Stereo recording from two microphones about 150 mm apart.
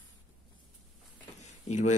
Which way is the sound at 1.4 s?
50° left (ahead or behind).